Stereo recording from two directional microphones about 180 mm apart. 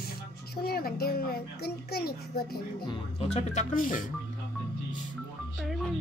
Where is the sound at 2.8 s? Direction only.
35° left (ahead or behind).